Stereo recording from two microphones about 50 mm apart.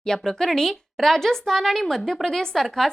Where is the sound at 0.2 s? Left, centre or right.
Centre.